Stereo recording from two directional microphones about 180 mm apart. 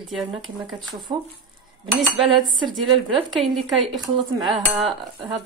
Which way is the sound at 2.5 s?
Centre (ahead or behind).